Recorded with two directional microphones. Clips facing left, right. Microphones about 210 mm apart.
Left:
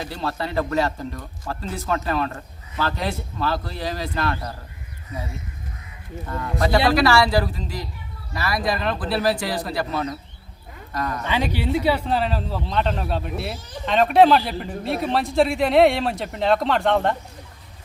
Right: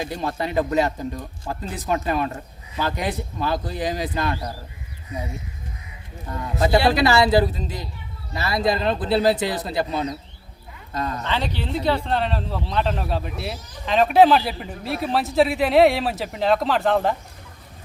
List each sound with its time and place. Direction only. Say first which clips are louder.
0.0 s speech: right 2 dB; 20° right (ahead or behind)
6.2 s speech: right 1 dB; 20° right (ahead or behind)
11.2 s speech: left 2 dB; 10° left (ahead or behind)